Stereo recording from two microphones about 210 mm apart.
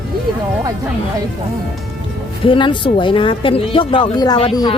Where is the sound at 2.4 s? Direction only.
25° left (ahead or behind).